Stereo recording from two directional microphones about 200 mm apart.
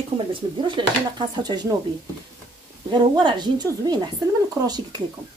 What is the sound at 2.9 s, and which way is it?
Speech, 20° right (ahead or behind).